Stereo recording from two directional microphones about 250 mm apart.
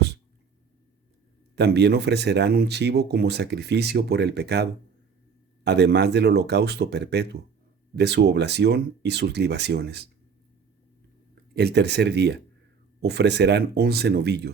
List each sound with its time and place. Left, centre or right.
1.5 s speech: right
11.5 s speech: right